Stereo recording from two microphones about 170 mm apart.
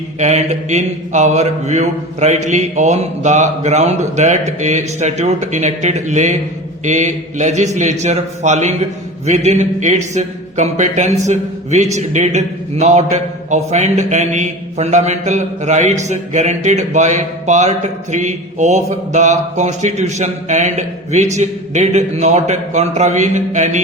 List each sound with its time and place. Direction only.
0.2 s a man's voice: 45° right (ahead or behind)